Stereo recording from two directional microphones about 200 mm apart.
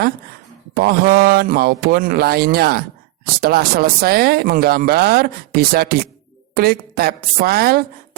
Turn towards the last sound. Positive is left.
turn(degrees=-50)  # may be behind; listen again after turning